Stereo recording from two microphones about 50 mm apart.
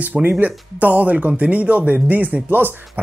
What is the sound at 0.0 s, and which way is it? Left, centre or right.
Speech, right.